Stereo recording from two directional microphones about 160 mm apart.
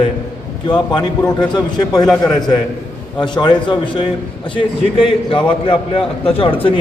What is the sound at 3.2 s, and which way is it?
A man's voice, 30° left (ahead or behind).